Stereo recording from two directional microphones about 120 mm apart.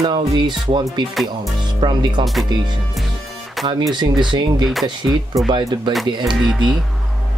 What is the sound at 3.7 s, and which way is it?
Speech, 40° right (ahead or behind).